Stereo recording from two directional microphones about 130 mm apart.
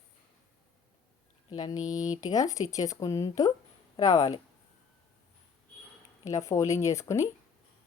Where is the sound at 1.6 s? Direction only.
30° left (ahead or behind).